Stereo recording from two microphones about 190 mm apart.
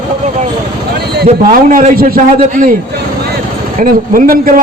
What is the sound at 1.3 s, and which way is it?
A man's voice, 45° right (ahead or behind).